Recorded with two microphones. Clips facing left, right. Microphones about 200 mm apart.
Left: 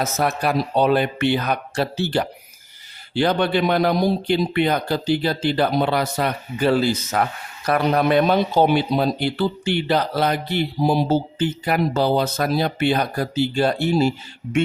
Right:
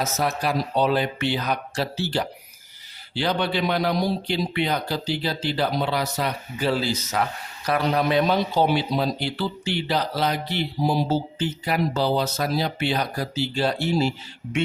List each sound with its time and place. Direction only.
0.0 s speech: 55° left (ahead or behind)